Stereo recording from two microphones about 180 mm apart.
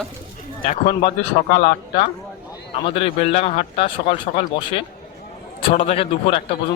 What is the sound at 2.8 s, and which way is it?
Speech, 30° left (ahead or behind).